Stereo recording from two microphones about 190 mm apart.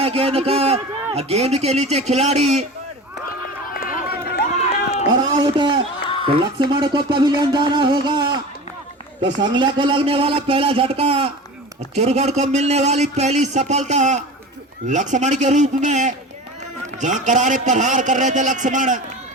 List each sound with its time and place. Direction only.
0.0 s a man's voice: 30° right (ahead or behind)
3.8 s run: 50° left (ahead or behind)
5.1 s a man's voice: 25° right (ahead or behind)
9.4 s a man's voice: 25° right (ahead or behind); by 19.0 s 40° right (ahead or behind)